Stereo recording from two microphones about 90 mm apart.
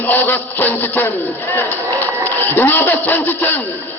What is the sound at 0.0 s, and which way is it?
Speech, 20° left (ahead or behind).